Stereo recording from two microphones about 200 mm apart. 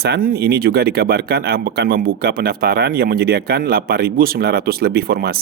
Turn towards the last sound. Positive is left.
turn(degrees=-50)  # may be behind; listen again after turning